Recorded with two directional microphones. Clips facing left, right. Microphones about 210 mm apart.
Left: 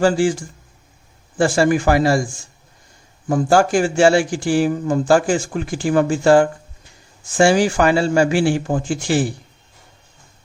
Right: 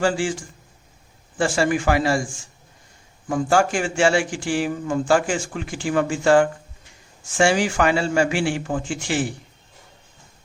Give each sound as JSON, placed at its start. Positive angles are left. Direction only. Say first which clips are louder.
{"t": 0.0, "sound": "speech", "louder": "left 6 dB", "side_deg": 40}
{"t": 3.2, "sound": "speech", "louder": "left 4 dB", "side_deg": 35}